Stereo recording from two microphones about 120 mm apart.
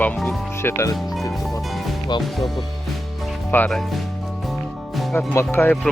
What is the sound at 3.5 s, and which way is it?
Speech, 15° left (ahead or behind).